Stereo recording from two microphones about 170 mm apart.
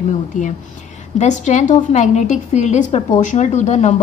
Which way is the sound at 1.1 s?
45° left (ahead or behind).